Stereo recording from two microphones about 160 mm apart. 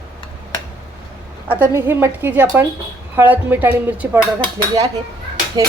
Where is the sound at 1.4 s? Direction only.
10° right (ahead or behind).